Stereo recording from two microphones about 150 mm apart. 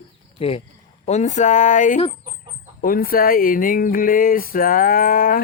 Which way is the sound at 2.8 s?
70° left (ahead or behind).